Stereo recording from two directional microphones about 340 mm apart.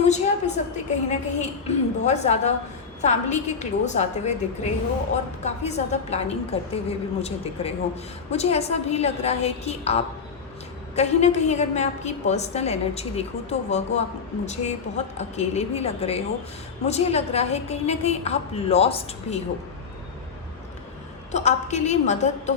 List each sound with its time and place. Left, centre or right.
0.0 s a woman's voice: centre
21.3 s a woman's voice: centre